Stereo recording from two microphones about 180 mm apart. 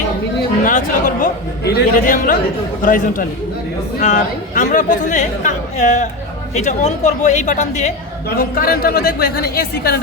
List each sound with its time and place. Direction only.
0.6 s a woman's voice: 45° left (ahead or behind)
8.4 s speech: 55° left (ahead or behind)